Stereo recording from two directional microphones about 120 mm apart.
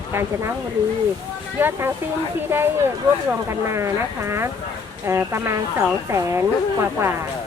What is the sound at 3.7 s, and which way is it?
Speech, 25° right (ahead or behind).